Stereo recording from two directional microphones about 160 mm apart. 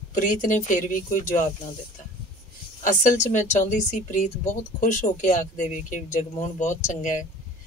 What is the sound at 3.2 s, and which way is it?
Speech, 50° left (ahead or behind).